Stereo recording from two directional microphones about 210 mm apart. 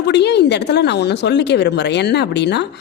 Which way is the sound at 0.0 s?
55° left (ahead or behind).